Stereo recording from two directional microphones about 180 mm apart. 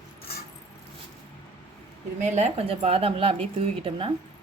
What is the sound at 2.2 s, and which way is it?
A woman's voice, 40° right (ahead or behind).